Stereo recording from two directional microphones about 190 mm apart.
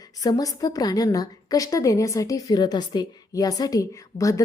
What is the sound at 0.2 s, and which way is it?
A woman's voice, 20° left (ahead or behind).